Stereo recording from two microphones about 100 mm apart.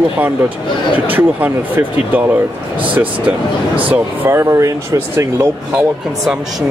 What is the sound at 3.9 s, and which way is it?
Speech, 20° right (ahead or behind).